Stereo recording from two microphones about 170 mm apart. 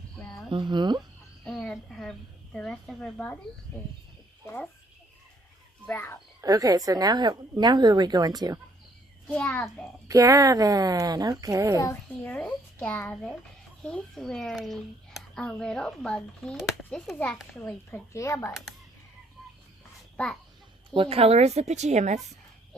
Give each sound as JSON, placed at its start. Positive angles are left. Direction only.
{"t": 0.2, "sound": "a sound", "side_deg": 5}
{"t": 0.5, "sound": "a woman's voice", "side_deg": -25}
{"t": 1.5, "sound": "a woman's voice", "side_deg": 5}
{"t": 5.8, "sound": "a child's voice", "side_deg": 15}
{"t": 6.4, "sound": "a woman's voice", "side_deg": -20}
{"t": 9.2, "sound": "a child's voice", "side_deg": 5}
{"t": 10.1, "sound": "a woman's voice", "side_deg": -20}
{"t": 11.8, "sound": "a child's voice", "side_deg": 15}
{"t": 20.9, "sound": "a woman's voice", "side_deg": -35}